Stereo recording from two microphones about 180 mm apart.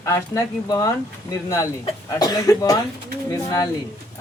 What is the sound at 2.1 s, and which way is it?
Speech, 20° left (ahead or behind).